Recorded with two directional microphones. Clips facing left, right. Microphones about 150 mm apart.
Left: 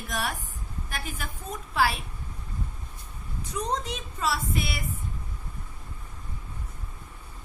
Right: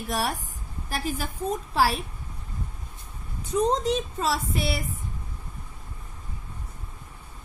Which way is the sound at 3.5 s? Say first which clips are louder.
Right 8 dB; 30° right (ahead or behind).